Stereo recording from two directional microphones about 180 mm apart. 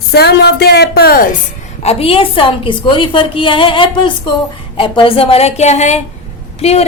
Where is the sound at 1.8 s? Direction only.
35° left (ahead or behind).